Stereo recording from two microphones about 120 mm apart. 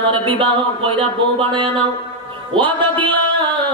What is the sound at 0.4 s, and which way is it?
Speech, 45° right (ahead or behind).